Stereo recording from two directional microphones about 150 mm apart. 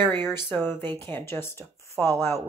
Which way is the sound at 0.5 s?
15° left (ahead or behind).